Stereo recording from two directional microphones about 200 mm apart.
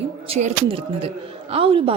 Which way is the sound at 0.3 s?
30° right (ahead or behind).